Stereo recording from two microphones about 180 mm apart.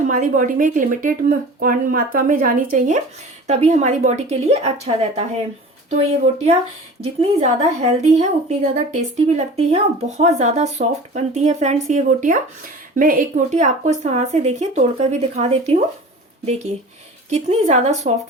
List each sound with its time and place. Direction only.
0.1 s a woman's voice: 45° right (ahead or behind)
17.3 s a woman's voice: 40° right (ahead or behind)